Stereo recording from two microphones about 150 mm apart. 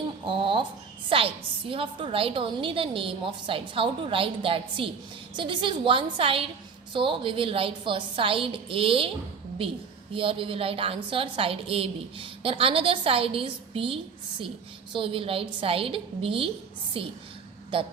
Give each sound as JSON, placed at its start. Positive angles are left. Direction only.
{"t": 0.3, "sound": "a woman's voice", "side_deg": -35}